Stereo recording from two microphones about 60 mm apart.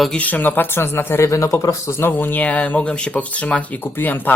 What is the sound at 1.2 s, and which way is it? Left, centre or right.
Speech, left.